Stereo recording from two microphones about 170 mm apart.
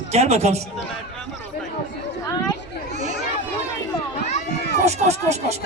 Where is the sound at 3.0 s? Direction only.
45° right (ahead or behind).